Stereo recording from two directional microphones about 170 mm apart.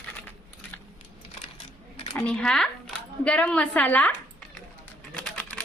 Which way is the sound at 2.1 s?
5° left (ahead or behind).